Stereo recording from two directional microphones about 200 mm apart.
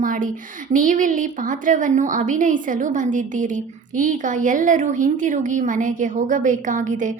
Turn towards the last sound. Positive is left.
turn(degrees=-40)  # may be behind; listen again after turning